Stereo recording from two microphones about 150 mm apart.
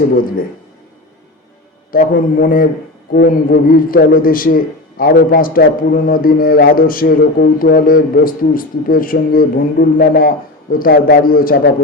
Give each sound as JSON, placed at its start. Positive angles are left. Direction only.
{"t": 1.9, "sound": "a man's voice", "side_deg": 70}
{"t": 3.1, "sound": "a man's voice", "side_deg": 85}